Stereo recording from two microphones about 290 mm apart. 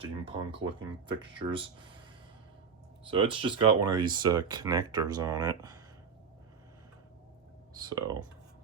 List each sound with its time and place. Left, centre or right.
0.0 s speech: centre
3.1 s speech: centre
7.8 s speech: centre